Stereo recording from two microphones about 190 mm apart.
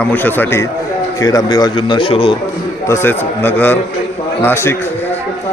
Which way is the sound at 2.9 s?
10° left (ahead or behind).